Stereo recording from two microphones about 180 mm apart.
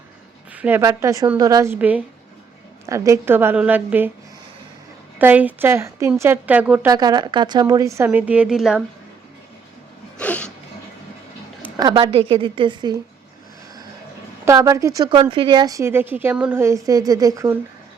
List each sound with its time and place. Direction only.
0.5 s a woman's voice: 10° right (ahead or behind)
5.2 s a woman's voice: 10° right (ahead or behind)
10.2 s a sound: 10° left (ahead or behind)
11.8 s a woman's voice: 25° right (ahead or behind)
14.4 s a woman's voice: 15° right (ahead or behind)